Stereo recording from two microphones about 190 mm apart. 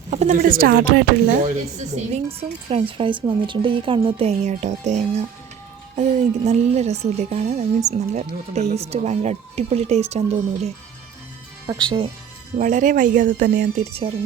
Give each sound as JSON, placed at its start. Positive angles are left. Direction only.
{"t": 0.1, "sound": "speech", "side_deg": -35}
{"t": 1.8, "sound": "a woman's voice", "side_deg": -35}
{"t": 11.7, "sound": "a woman's voice", "side_deg": -25}
{"t": 12.5, "sound": "speech", "side_deg": -40}